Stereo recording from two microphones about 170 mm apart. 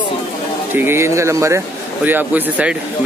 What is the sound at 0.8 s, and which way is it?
Speech, 15° right (ahead or behind).